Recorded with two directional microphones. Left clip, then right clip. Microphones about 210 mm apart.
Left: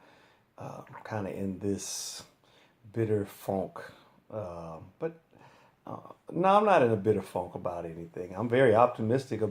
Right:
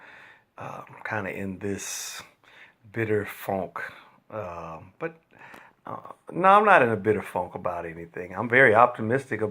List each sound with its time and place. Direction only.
0.5 s a sound: 10° right (ahead or behind)
1.0 s speech: 5° right (ahead or behind)
3.5 s speech: 25° right (ahead or behind)
4.4 s speech: 5° right (ahead or behind)
4.9 s a sound: 5° right (ahead or behind)
6.4 s speech: 5° right (ahead or behind)